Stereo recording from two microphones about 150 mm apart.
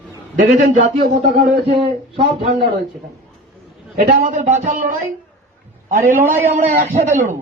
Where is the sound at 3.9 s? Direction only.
90° right.